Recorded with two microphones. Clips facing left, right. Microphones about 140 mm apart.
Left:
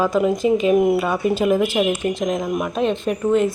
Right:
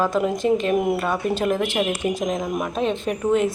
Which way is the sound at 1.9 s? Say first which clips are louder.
Left 2 dB; 5° right (ahead or behind).